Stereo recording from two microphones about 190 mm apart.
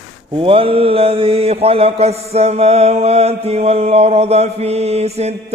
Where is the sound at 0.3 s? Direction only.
30° right (ahead or behind).